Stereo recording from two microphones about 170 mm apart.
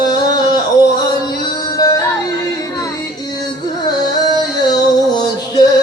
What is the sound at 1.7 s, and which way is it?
Music, 20° left (ahead or behind).